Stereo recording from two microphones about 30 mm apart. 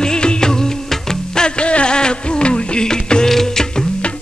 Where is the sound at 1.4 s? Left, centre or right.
Left.